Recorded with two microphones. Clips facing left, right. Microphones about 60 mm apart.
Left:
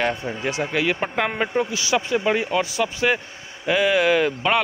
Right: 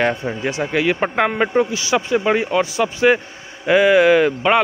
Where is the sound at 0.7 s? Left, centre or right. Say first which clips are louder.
Right 6 dB; centre.